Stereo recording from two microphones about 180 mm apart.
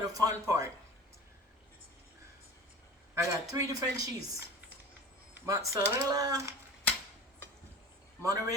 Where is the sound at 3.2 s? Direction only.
20° right (ahead or behind).